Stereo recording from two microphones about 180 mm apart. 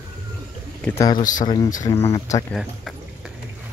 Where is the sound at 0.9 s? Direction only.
20° left (ahead or behind).